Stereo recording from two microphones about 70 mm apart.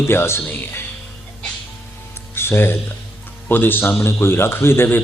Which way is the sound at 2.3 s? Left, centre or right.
Left.